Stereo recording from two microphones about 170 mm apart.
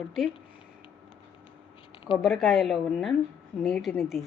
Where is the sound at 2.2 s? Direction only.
Centre (ahead or behind).